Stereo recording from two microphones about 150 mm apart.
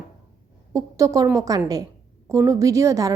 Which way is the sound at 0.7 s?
20° right (ahead or behind).